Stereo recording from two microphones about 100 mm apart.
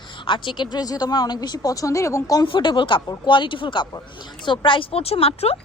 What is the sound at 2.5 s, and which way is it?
A woman's voice, 50° left (ahead or behind).